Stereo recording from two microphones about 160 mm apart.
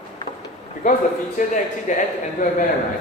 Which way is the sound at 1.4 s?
55° left (ahead or behind).